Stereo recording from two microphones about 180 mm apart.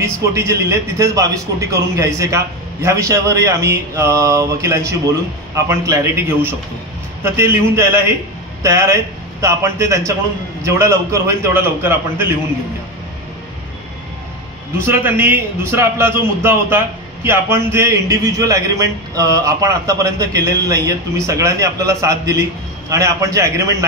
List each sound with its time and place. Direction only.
0.0 s a man's voice: 15° right (ahead or behind)
14.8 s a man's voice: 10° right (ahead or behind)